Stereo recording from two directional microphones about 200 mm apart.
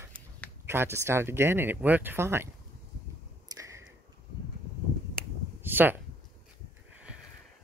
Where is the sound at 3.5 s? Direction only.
15° right (ahead or behind).